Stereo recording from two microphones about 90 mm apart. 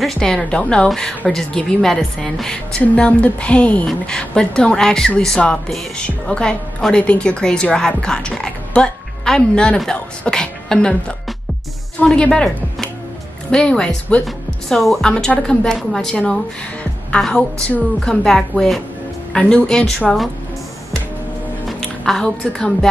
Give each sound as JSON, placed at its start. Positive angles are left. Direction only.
{"t": 0.0, "sound": "a woman's voice", "side_deg": 5}
{"t": 14.2, "sound": "a woman's voice", "side_deg": 0}
{"t": 18.2, "sound": "a woman's voice", "side_deg": 5}
{"t": 21.6, "sound": "a woman's voice", "side_deg": 5}